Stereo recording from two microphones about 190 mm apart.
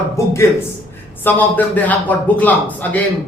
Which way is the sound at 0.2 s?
15° left (ahead or behind).